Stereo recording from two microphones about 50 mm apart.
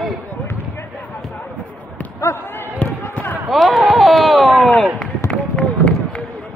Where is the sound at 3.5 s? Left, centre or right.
Centre.